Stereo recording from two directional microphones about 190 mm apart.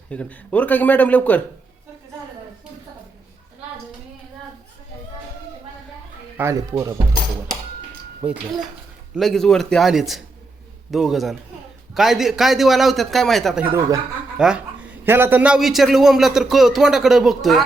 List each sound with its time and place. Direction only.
0.1 s speech: 5° left (ahead or behind)
6.3 s speech: 15° right (ahead or behind)
8.2 s a man's voice: 5° right (ahead or behind)
13.7 s speech: 20° right (ahead or behind)
14.3 s a man's voice: 5° right (ahead or behind)